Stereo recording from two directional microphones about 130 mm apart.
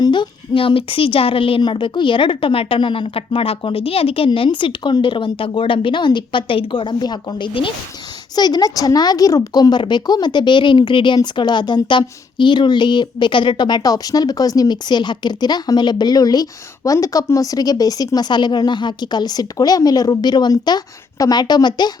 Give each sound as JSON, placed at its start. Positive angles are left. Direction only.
{"t": 0.0, "sound": "a woman's voice", "side_deg": 35}